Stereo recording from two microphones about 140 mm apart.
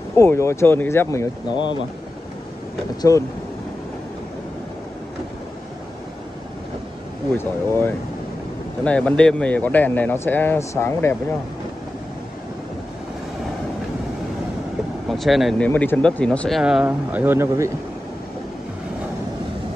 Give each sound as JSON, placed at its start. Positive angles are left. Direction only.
{"t": 0.1, "sound": "speech", "side_deg": 15}
{"t": 1.5, "sound": "speech", "side_deg": 35}
{"t": 3.0, "sound": "speech", "side_deg": 25}
{"t": 7.3, "sound": "speech", "side_deg": 15}
{"t": 15.0, "sound": "speech", "side_deg": 0}
{"t": 16.8, "sound": "speech", "side_deg": -15}